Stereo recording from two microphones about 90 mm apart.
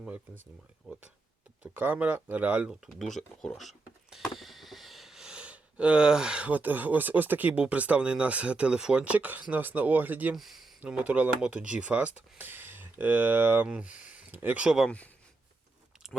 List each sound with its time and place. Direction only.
1.6 s speech: 20° right (ahead or behind)
2.6 s speech: 5° right (ahead or behind); by 10.3 s 20° right (ahead or behind)
10.3 s speech: centre (ahead or behind)
10.8 s speech: 15° right (ahead or behind)
14.8 s speech: 15° left (ahead or behind)